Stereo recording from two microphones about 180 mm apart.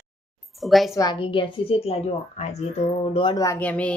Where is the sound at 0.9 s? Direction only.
20° left (ahead or behind).